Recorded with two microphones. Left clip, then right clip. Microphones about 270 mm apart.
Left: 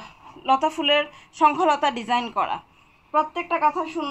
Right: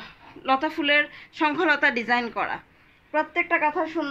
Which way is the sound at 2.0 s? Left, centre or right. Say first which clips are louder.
Left 1 dB; right.